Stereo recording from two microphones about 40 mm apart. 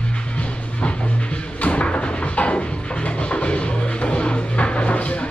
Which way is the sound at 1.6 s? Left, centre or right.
Left.